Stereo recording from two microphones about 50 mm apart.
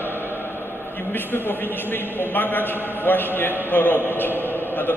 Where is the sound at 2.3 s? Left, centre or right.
Left.